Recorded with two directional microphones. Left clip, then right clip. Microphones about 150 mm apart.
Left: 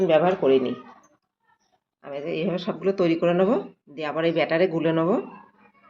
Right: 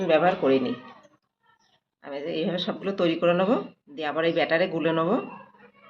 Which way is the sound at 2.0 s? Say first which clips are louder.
Left 1 dB; 45° left (ahead or behind).